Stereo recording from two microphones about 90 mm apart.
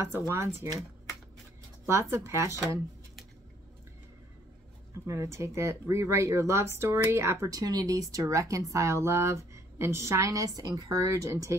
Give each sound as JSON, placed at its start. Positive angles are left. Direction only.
{"t": 0.3, "sound": "speech", "side_deg": -30}
{"t": 1.9, "sound": "speech", "side_deg": -30}
{"t": 5.0, "sound": "speech", "side_deg": -35}